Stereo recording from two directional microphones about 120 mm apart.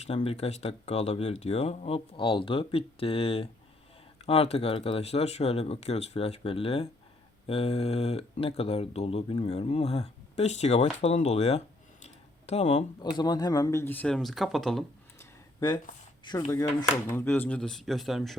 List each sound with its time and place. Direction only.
0.0 s speech: 60° left (ahead or behind)
2.1 s speech: 45° left (ahead or behind); by 11.6 s 60° left (ahead or behind)
12.0 s a sound: 65° left (ahead or behind)
13.0 s speech: 35° left (ahead or behind); by 14.2 s 15° left (ahead or behind)
14.2 s speech: centre (ahead or behind)
15.6 s speech: 40° left (ahead or behind)
17.1 s speech: 20° left (ahead or behind)
17.6 s speech: 5° left (ahead or behind)